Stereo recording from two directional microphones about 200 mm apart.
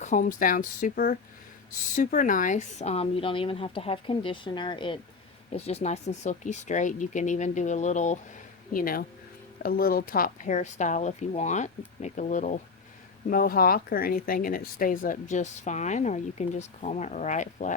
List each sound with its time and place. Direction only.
0.0 s speech: 40° left (ahead or behind)
8.7 s speech: 45° left (ahead or behind)